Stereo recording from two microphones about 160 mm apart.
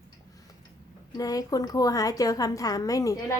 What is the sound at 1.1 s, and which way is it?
A woman's voice, 25° left (ahead or behind).